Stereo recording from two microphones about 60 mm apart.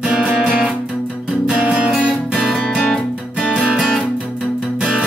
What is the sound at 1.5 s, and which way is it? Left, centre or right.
Music, centre.